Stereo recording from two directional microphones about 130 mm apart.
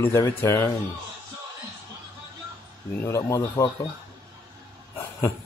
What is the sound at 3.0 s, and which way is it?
Speech, 25° left (ahead or behind).